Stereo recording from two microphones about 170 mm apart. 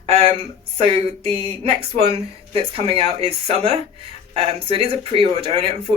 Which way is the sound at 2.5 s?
35° right (ahead or behind).